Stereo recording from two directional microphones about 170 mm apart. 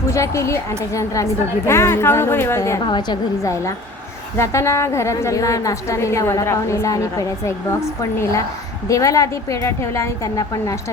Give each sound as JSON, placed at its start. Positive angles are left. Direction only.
{"t": 0.1, "sound": "a woman's voice", "side_deg": 15}